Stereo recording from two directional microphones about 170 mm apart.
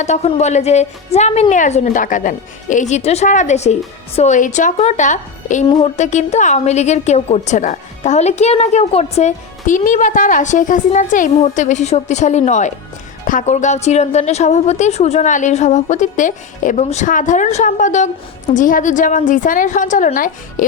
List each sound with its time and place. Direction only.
0.0 s a woman's voice: 40° left (ahead or behind)
5.6 s speech: 30° left (ahead or behind)
6.0 s a woman's voice: 45° left (ahead or behind)